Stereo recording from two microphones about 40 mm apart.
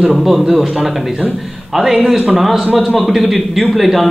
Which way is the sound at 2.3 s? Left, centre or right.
Centre.